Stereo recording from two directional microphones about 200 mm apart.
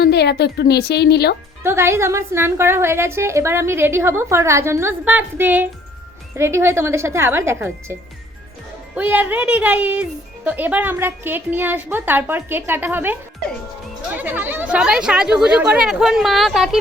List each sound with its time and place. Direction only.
0.0 s a woman's voice: 55° left (ahead or behind)
1.6 s speech: 10° right (ahead or behind)
9.0 s speech: 10° right (ahead or behind)